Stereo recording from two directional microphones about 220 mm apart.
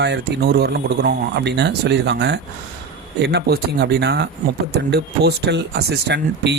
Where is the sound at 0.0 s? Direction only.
50° right (ahead or behind).